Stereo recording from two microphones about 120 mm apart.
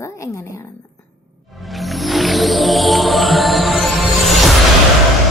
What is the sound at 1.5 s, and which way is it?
Music, centre (ahead or behind).